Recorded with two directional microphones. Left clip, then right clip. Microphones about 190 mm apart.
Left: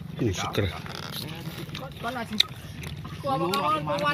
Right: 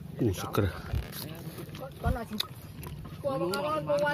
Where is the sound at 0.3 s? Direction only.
20° right (ahead or behind).